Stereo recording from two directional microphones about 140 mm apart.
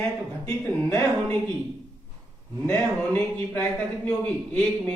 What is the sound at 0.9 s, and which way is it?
Speech, 20° left (ahead or behind).